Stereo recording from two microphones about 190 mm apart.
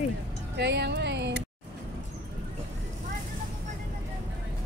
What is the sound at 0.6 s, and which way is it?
Speech, 65° right (ahead or behind).